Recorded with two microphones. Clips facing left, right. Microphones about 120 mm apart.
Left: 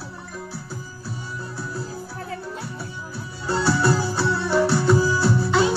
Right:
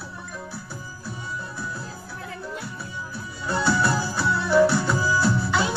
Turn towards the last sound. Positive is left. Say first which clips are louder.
# left 2 dB
turn(degrees=30)  # may be behind; listen again after turning